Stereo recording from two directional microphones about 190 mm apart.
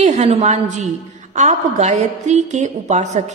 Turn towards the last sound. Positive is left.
turn(degrees=-40)  # may be behind; listen again after turning